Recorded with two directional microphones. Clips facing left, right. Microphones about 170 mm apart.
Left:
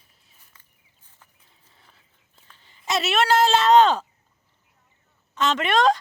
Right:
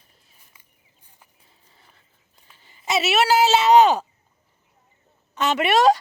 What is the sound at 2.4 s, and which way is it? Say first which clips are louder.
Speech: right 1 dB; 10° right (ahead or behind).